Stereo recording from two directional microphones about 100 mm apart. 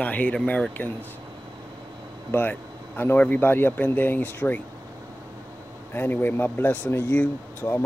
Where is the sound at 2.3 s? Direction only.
20° left (ahead or behind).